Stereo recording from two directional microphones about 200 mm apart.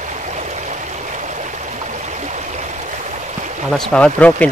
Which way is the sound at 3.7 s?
5° left (ahead or behind).